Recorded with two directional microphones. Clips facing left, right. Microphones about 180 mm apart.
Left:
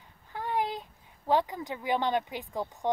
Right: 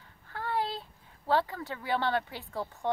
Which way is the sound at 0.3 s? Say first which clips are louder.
Left 2 dB; 15° left (ahead or behind).